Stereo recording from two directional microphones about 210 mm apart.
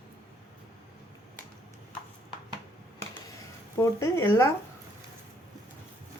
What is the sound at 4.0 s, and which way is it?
Speech, 10° left (ahead or behind).